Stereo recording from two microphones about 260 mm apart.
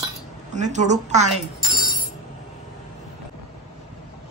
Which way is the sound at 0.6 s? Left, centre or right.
Right.